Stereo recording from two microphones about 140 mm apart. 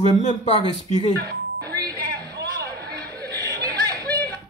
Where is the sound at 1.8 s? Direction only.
25° right (ahead or behind).